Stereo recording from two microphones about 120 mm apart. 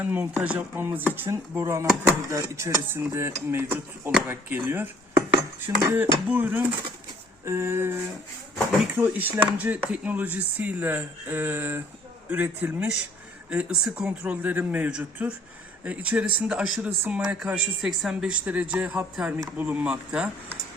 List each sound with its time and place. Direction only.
0.0 s speech: 15° right (ahead or behind)
4.3 s cutlery: 15° right (ahead or behind)
5.8 s speech: 15° right (ahead or behind)
9.0 s speech: 15° right (ahead or behind)